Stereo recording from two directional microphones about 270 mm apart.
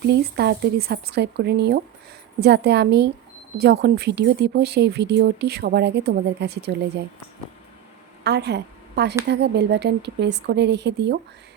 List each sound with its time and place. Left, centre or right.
0.0 s speech: right
8.2 s a woman's voice: right